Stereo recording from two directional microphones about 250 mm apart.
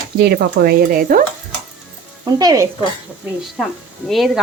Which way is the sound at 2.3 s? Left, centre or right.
Centre.